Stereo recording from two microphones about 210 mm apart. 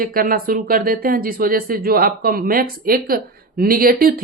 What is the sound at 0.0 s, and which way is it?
Speech, 45° right (ahead or behind).